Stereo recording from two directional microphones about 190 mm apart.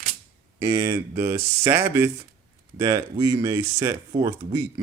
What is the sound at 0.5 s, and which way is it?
Speech, 15° right (ahead or behind).